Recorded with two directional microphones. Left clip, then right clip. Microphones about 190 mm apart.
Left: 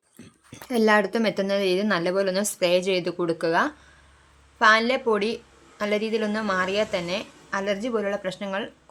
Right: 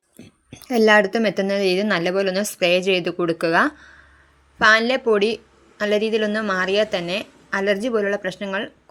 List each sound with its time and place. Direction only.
0.2 s a woman's voice: 15° right (ahead or behind)